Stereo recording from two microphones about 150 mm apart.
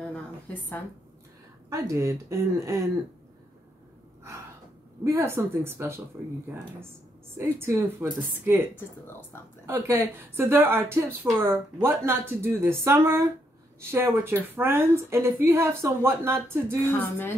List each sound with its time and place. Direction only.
0.0 s a sound: 10° left (ahead or behind)
1.7 s speech: 20° right (ahead or behind)
5.0 s speech: 20° right (ahead or behind)
7.3 s speech: 15° right (ahead or behind)
8.7 s speech: 15° left (ahead or behind)
9.7 s speech: 15° right (ahead or behind)
16.8 s speech: 15° left (ahead or behind)